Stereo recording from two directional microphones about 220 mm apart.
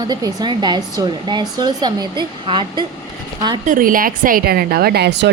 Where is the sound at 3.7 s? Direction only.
40° right (ahead or behind).